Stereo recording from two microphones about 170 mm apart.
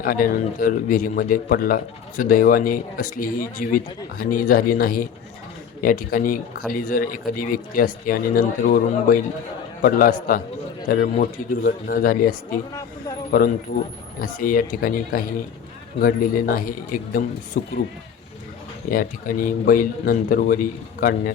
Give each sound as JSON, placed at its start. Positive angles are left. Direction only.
{"t": 0.0, "sound": "a man's voice", "side_deg": 55}
{"t": 14.2, "sound": "a man's voice", "side_deg": 55}
{"t": 18.9, "sound": "a man's voice", "side_deg": 55}